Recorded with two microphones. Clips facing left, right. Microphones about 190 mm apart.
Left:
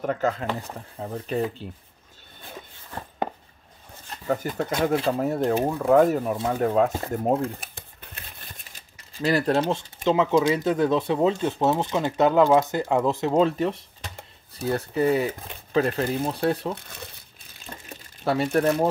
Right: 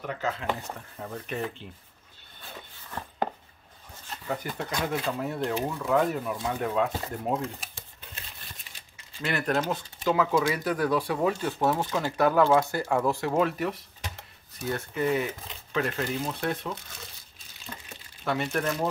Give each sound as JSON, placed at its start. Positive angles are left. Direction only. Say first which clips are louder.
{"t": 0.0, "sound": "speech", "louder": "left 7 dB", "side_deg": 45}
{"t": 0.6, "sound": "speech", "louder": "left 4 dB", "side_deg": 30}
{"t": 4.3, "sound": "speech", "louder": "left 7 dB", "side_deg": 45}
{"t": 9.2, "sound": "speech", "louder": "left 6 dB", "side_deg": 35}
{"t": 17.7, "sound": "a sound", "louder": "left 2 dB", "side_deg": 30}
{"t": 18.2, "sound": "speech", "louder": "left 6 dB", "side_deg": 35}
{"t": 18.6, "sound": "speech", "louder": "left 7 dB", "side_deg": 55}